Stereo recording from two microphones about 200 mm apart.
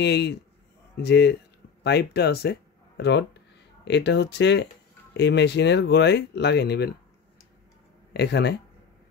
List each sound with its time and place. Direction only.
0.0 s speech: 55° left (ahead or behind)
8.1 s speech: 55° left (ahead or behind)